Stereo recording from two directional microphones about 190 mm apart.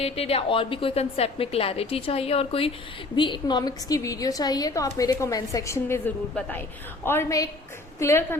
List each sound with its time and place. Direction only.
0.0 s a woman's voice: 30° left (ahead or behind); by 8.4 s 15° left (ahead or behind)